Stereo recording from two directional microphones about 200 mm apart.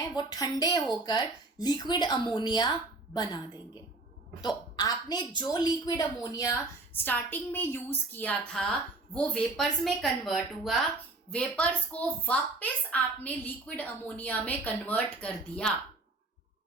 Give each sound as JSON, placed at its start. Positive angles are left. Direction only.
{"t": 0.2, "sound": "a woman's voice", "side_deg": 20}